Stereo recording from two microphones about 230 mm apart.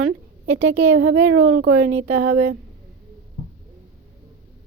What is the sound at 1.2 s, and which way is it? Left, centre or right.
Speech, right.